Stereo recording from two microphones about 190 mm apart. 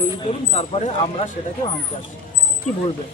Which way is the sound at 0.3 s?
35° left (ahead or behind).